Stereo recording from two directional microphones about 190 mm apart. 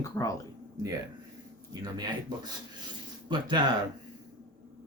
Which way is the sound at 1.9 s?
20° right (ahead or behind).